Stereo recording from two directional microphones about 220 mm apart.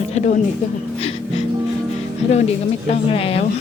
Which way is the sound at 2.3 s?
30° left (ahead or behind).